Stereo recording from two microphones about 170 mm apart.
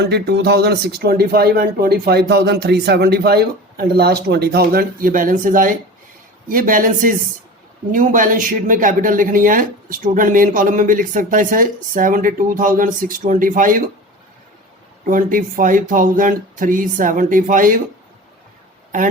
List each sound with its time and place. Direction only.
0.0 s speech: 75° right (ahead or behind); by 13.9 s 50° right (ahead or behind)
15.0 s speech: 50° right (ahead or behind)